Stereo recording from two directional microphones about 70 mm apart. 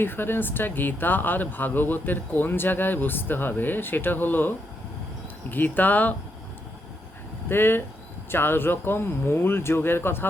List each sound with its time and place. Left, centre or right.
0.0 s speech: left
7.4 s speech: left